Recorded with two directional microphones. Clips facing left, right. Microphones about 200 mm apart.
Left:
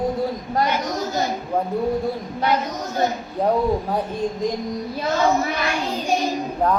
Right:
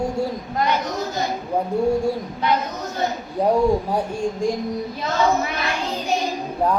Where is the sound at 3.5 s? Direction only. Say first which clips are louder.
Right 2 dB; 10° right (ahead or behind).